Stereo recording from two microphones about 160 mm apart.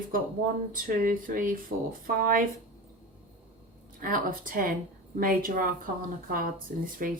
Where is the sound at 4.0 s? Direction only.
60° right (ahead or behind).